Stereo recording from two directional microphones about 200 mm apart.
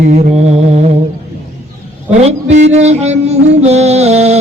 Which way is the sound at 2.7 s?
35° right (ahead or behind).